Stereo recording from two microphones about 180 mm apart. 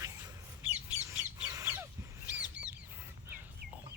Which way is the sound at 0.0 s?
15° right (ahead or behind).